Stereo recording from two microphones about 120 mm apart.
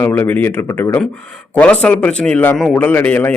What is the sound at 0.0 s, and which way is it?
A man's voice, 15° left (ahead or behind).